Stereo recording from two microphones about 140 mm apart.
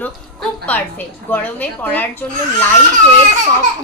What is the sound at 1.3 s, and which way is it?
A child's voice, 10° left (ahead or behind).